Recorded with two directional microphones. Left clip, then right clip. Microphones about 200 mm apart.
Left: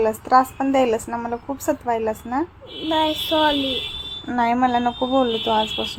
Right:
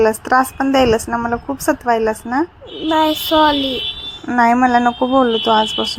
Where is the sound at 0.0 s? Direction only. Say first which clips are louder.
Right 3 dB; 20° right (ahead or behind).